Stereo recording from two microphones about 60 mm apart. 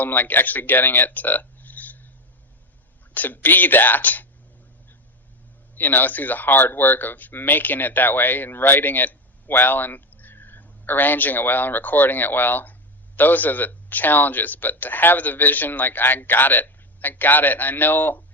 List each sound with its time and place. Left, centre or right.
0.0 s speech: left
3.2 s speech: left
5.7 s speech: left